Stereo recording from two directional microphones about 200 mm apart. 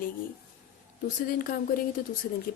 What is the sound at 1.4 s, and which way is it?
Speech, 45° left (ahead or behind).